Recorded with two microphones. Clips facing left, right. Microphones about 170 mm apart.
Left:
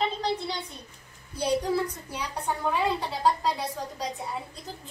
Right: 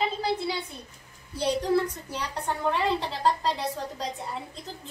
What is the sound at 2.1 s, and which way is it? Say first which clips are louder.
A child's voice: even; centre (ahead or behind).